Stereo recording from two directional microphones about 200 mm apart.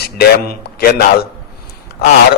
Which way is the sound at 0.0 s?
50° left (ahead or behind).